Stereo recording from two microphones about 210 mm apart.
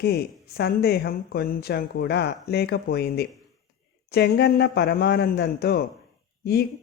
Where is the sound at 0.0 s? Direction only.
50° left (ahead or behind).